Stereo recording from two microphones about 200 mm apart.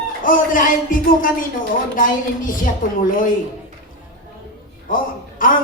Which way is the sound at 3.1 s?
40° left (ahead or behind).